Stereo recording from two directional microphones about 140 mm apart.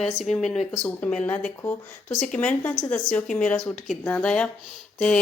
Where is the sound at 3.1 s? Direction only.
10° left (ahead or behind).